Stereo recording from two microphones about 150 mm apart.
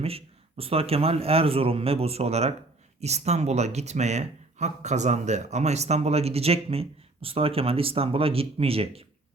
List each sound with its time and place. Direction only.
0.0 s speech: 40° right (ahead or behind)